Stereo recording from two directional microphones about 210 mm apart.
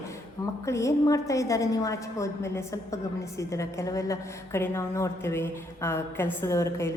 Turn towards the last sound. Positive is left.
turn(degrees=15)  # may be behind; listen again after turning